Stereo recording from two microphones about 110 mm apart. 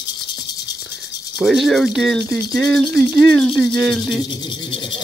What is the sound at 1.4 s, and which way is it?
Speech, centre (ahead or behind).